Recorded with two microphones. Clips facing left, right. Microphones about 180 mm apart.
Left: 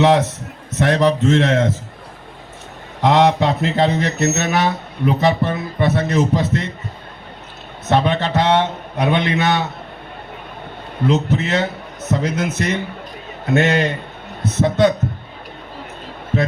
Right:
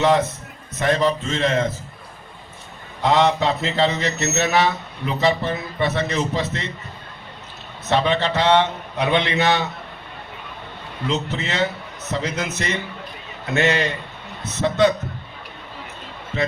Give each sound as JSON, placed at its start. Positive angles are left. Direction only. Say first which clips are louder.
{"t": 0.0, "sound": "a man's voice", "louder": "left 4 dB", "side_deg": 75}
{"t": 3.0, "sound": "speech", "louder": "left 4 dB", "side_deg": 60}
{"t": 7.9, "sound": "speech", "louder": "left 2 dB", "side_deg": 50}
{"t": 11.0, "sound": "a man's voice", "louder": "left 7 dB", "side_deg": 50}
{"t": 16.3, "sound": "speech", "louder": "left 4 dB", "side_deg": 50}